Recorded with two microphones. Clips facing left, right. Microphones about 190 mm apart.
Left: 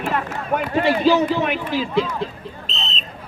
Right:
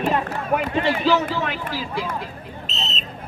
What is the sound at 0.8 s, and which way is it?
A man's voice, 15° left (ahead or behind).